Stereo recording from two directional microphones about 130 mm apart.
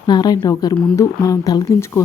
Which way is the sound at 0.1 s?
30° left (ahead or behind).